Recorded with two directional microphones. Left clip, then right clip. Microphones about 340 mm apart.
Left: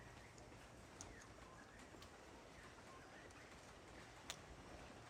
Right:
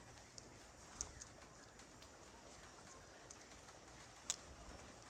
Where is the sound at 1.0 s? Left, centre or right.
Centre.